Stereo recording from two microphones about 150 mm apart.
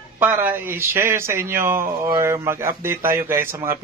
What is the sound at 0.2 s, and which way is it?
A man's voice, 15° right (ahead or behind).